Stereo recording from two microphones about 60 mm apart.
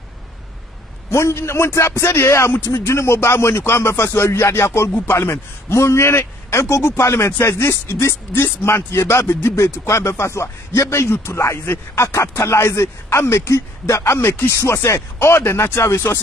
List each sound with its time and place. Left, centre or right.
1.1 s a man's voice: left
12.0 s a man's voice: left